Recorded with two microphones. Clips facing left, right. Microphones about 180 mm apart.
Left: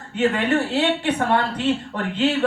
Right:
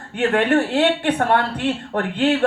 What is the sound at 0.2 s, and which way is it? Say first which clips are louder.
Speech: right 2 dB; 60° right (ahead or behind).